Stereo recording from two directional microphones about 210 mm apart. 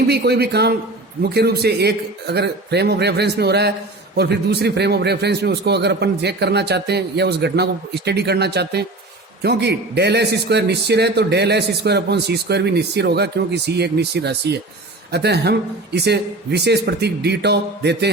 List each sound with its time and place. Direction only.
0.1 s a man's voice: 50° right (ahead or behind)